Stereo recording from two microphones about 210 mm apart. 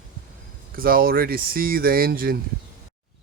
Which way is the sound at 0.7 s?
45° right (ahead or behind).